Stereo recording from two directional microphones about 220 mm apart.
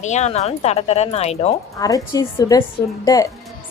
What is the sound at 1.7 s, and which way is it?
A woman's voice, 15° left (ahead or behind).